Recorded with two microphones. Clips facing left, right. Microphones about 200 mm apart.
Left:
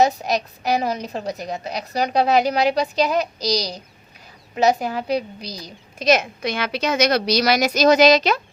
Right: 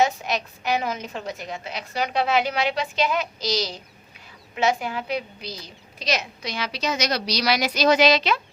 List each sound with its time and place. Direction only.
0.0 s a woman's voice: 40° left (ahead or behind)